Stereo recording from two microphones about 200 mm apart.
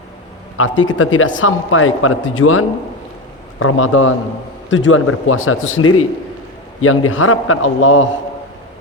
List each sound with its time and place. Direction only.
0.5 s a man's voice: 80° left
4.7 s a man's voice: 75° left (ahead or behind)